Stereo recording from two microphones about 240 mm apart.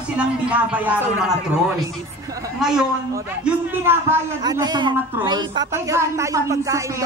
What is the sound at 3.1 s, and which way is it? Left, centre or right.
A man's voice, centre.